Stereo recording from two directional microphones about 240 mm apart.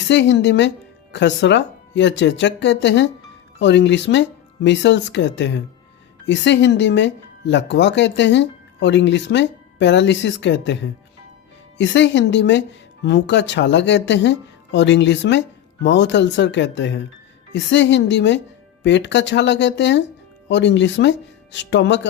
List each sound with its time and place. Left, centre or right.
0.0 s speech: left